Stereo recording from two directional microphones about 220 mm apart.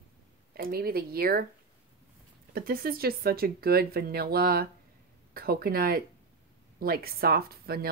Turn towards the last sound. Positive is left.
turn(degrees=-45)  # may be behind; listen again after turning